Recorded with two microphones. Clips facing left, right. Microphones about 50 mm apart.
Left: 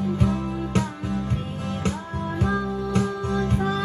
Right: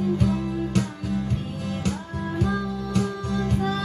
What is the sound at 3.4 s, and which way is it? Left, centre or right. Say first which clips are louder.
Music: even; left.